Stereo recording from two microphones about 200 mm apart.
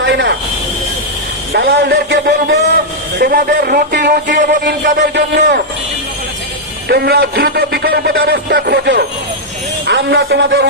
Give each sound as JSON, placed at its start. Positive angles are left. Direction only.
{"t": 0.0, "sound": "a sound", "side_deg": -65}
{"t": 1.5, "sound": "a man's voice", "side_deg": -55}
{"t": 5.1, "sound": "a man's voice", "side_deg": -55}
{"t": 6.8, "sound": "a man's voice", "side_deg": -50}
{"t": 9.8, "sound": "music", "side_deg": -60}